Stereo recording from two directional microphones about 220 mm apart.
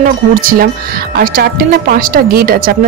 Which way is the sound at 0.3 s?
40° right (ahead or behind).